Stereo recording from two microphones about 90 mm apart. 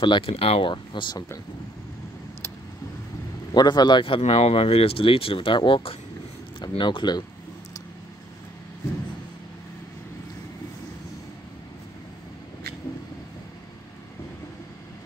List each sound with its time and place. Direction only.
0.0 s speech: 70° left (ahead or behind)
3.5 s speech: 55° left (ahead or behind); by 5.9 s 80° left
6.6 s speech: 60° left (ahead or behind)